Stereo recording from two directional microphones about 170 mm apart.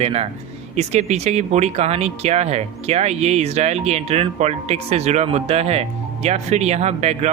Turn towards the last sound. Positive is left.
turn(degrees=-40)  # may be behind; listen again after turning